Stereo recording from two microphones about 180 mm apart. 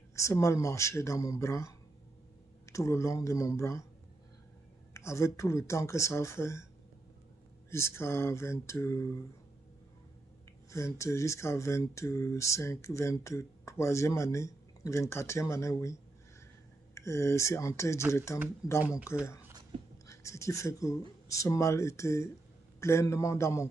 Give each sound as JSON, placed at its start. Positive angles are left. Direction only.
{"t": 0.1, "sound": "speech", "side_deg": 15}
{"t": 4.9, "sound": "speech", "side_deg": 15}
{"t": 7.7, "sound": "speech", "side_deg": 15}
{"t": 10.7, "sound": "speech", "side_deg": 15}
{"t": 18.8, "sound": "speech", "side_deg": -5}
{"t": 20.1, "sound": "speech", "side_deg": 15}